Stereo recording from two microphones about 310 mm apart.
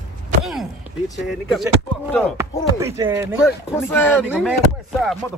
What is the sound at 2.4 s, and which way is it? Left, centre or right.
Chopping, centre.